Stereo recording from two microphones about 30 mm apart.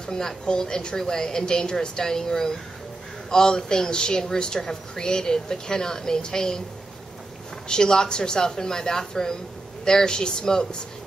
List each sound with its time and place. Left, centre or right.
0.0 s a woman's voice: left
7.6 s a woman's voice: left